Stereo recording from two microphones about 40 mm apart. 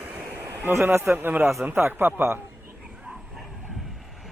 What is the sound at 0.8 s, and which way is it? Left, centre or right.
Speech, right.